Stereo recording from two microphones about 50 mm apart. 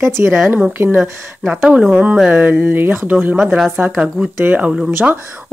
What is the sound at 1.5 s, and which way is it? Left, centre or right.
Speech, right.